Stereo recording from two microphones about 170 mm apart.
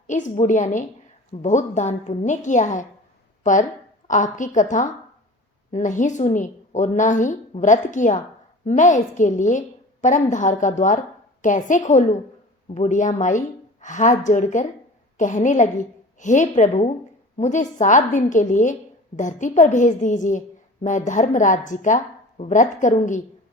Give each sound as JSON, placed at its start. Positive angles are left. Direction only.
{"t": 0.1, "sound": "a woman's voice", "side_deg": 45}